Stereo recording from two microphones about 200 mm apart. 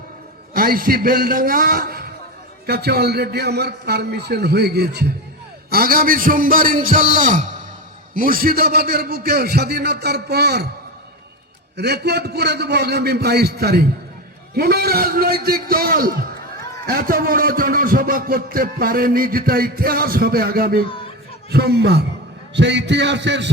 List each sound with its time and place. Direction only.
0.5 s music: 45° right (ahead or behind)
2.6 s a man's voice: 55° right (ahead or behind)
5.7 s music: 50° right (ahead or behind)
11.8 s a man's voice: 55° right (ahead or behind)
14.5 s music: 50° right (ahead or behind)
22.5 s a man's voice: 60° right (ahead or behind)